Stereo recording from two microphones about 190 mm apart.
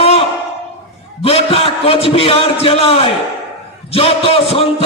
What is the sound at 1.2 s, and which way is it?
A man's voice, 30° left (ahead or behind).